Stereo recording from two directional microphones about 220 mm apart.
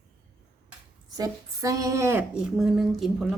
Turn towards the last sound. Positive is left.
turn(degrees=0)  # may be behind; listen again after turning